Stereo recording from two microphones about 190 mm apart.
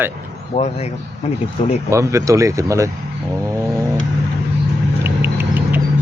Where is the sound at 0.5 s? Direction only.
35° left (ahead or behind).